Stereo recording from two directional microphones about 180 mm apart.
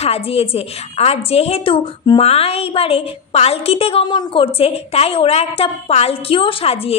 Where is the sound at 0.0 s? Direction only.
35° left (ahead or behind).